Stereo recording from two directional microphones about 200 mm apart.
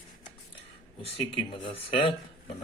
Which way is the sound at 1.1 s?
30° left (ahead or behind).